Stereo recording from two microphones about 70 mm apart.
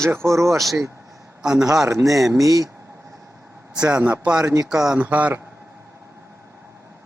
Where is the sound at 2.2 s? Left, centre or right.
Right.